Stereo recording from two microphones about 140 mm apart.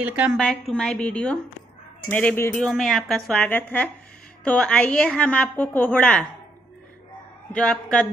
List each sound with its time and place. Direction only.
0.0 s a woman's voice: 10° right (ahead or behind)
0.4 s a woman's voice: 5° left (ahead or behind)
2.6 s a woman's voice: centre (ahead or behind)
7.5 s a woman's voice: 5° left (ahead or behind)